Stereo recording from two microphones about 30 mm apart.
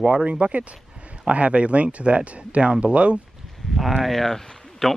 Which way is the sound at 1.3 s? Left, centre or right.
Right.